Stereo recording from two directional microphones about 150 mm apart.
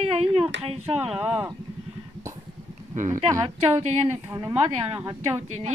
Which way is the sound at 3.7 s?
45° right (ahead or behind).